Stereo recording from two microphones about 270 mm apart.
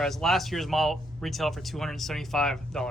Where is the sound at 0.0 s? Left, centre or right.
Centre.